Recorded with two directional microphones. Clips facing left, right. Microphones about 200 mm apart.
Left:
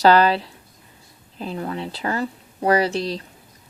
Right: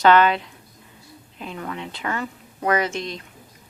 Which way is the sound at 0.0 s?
35° left (ahead or behind).